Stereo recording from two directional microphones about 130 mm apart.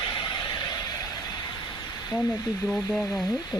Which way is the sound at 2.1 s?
30° left (ahead or behind).